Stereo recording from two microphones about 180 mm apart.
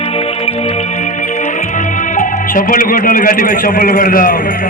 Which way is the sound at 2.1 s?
45° left (ahead or behind).